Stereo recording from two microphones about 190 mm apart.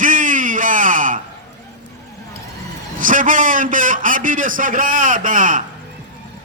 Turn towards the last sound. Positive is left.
turn(degrees=-45)  # may be behind; listen again after turning